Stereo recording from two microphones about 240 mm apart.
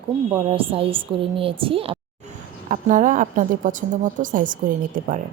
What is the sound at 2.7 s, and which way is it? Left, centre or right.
A woman's voice, right.